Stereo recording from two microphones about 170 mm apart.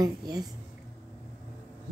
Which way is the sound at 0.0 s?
20° right (ahead or behind).